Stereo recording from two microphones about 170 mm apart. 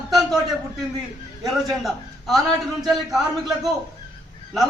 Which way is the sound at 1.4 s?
Centre (ahead or behind).